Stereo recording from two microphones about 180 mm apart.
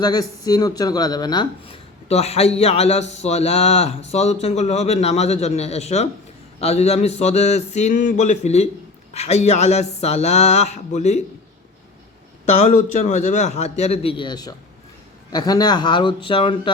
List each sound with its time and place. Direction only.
0.0 s speech: 20° left (ahead or behind)
2.0 s speech: 35° left (ahead or behind)
12.5 s speech: 40° left (ahead or behind)